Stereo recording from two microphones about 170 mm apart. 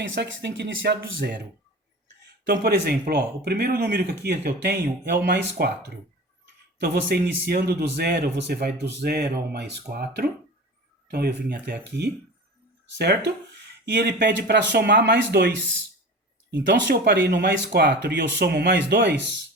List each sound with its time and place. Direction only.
0.0 s speech: 90° right
2.5 s speech: 70° right (ahead or behind)
13.0 s speech: 90° right